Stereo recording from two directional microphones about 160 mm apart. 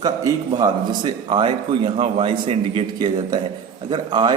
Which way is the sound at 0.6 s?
30° right (ahead or behind).